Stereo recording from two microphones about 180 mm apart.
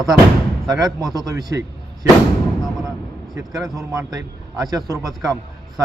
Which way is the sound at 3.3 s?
20° right (ahead or behind).